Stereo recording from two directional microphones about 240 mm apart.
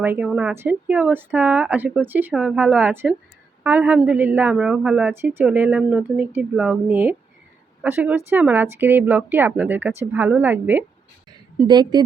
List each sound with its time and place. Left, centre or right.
0.0 s a woman's voice: centre